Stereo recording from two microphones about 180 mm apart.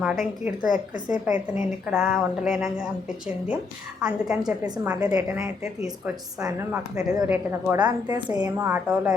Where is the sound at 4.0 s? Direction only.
5° right (ahead or behind).